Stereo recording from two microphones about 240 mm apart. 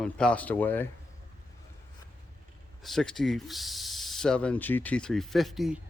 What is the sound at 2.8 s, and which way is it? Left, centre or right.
Speech, centre.